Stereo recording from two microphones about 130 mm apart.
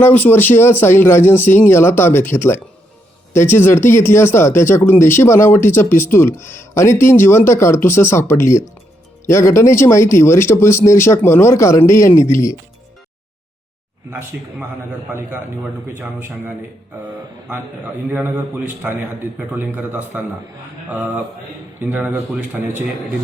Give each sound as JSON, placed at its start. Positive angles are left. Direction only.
{"t": 0.0, "sound": "speech", "side_deg": 15}
{"t": 14.3, "sound": "a man's voice", "side_deg": -10}
{"t": 16.0, "sound": "a man's voice", "side_deg": -15}
{"t": 18.1, "sound": "a man's voice", "side_deg": -15}
{"t": 21.8, "sound": "a man's voice", "side_deg": -15}